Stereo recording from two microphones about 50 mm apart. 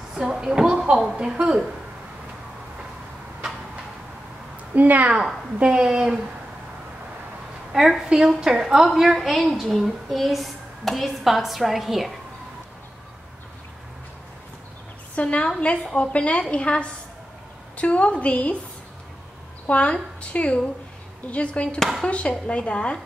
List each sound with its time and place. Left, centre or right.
0.1 s a woman's voice: centre
4.7 s a woman's voice: right
5.6 s a woman's voice: centre
7.7 s a woman's voice: centre
15.1 s a woman's voice: left
19.6 s a woman's voice: left